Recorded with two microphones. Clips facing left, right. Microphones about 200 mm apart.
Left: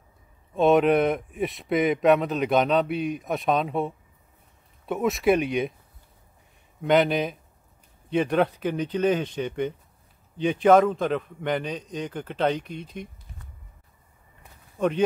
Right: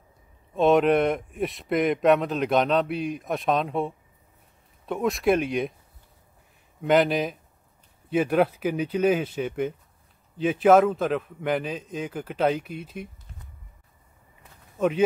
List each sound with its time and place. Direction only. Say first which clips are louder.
0.6 s speech: even; centre (ahead or behind)
6.8 s speech: even; centre (ahead or behind)
14.8 s speech: right 1 dB; 5° right (ahead or behind)